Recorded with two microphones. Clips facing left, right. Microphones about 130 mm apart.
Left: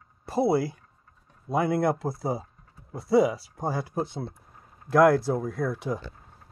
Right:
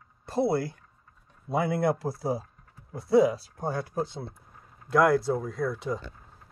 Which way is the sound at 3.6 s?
15° left (ahead or behind).